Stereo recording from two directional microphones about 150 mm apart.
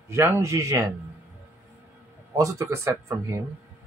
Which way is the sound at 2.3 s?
20° right (ahead or behind).